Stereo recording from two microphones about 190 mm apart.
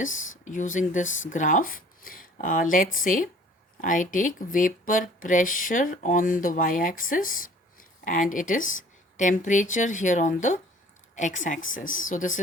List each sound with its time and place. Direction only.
0.4 s a woman's voice: 40° left (ahead or behind)